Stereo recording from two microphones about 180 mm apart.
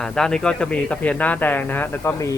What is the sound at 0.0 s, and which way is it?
Speech, 5° left (ahead or behind).